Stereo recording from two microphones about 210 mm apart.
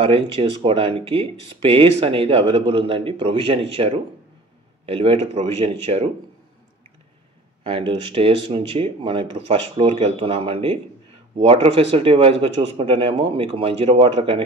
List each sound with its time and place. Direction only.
0.0 s speech: 25° right (ahead or behind)
7.6 s speech: 25° right (ahead or behind)